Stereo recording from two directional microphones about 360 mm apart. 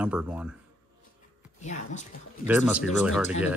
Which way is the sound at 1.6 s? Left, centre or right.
Centre.